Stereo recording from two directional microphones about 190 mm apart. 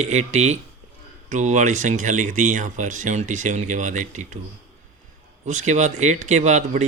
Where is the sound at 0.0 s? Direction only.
35° right (ahead or behind).